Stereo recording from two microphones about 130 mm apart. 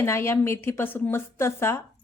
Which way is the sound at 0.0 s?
20° left (ahead or behind).